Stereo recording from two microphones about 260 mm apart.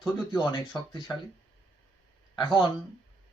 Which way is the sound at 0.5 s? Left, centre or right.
Centre.